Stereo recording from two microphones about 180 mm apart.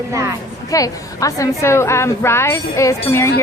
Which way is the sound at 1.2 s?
15° left (ahead or behind).